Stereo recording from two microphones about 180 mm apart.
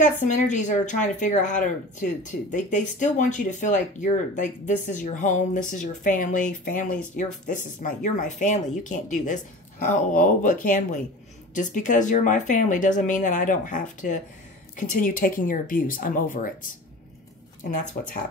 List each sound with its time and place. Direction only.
0.0 s a woman's voice: 40° left (ahead or behind)